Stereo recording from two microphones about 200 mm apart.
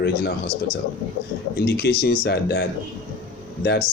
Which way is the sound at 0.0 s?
50° left (ahead or behind).